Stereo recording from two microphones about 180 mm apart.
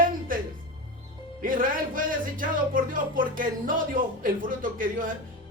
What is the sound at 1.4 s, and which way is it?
Speech, 50° right (ahead or behind).